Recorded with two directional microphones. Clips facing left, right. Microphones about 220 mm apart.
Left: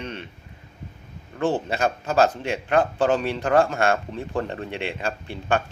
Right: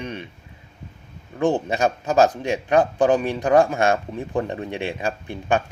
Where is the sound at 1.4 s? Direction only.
15° right (ahead or behind).